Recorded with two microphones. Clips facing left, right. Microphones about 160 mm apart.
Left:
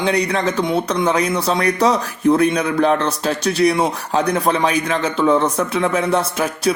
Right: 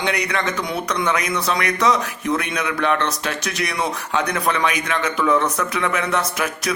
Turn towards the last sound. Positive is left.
turn(degrees=30)  # may be behind; listen again after turning